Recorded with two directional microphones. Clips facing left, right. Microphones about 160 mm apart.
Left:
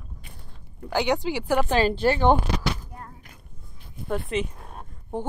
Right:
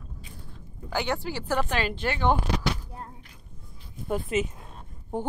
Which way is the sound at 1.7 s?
35° left (ahead or behind).